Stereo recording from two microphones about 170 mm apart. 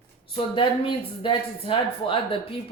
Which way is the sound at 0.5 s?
30° left (ahead or behind).